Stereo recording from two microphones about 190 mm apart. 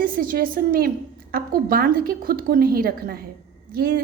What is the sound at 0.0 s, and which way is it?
A woman's voice, 50° right (ahead or behind).